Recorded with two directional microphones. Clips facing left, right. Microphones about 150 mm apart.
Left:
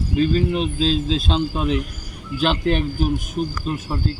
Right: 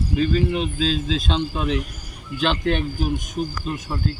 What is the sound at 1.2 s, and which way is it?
Speech, 5° left (ahead or behind).